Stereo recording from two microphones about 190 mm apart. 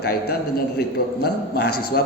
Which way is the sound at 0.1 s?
55° left (ahead or behind).